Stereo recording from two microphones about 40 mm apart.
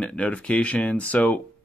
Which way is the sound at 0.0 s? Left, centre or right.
Left.